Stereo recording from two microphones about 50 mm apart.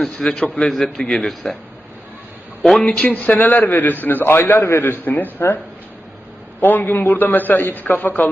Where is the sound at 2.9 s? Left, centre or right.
Left.